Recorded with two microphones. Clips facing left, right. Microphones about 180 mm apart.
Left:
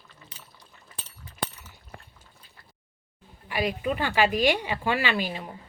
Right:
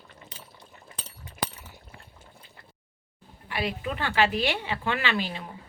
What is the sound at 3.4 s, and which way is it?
Speech, 15° left (ahead or behind).